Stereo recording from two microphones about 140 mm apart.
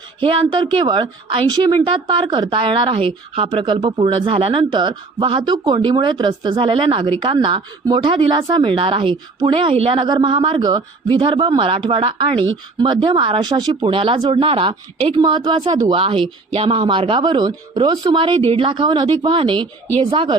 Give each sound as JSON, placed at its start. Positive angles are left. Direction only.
{"t": 0.2, "sound": "a woman's voice", "side_deg": -40}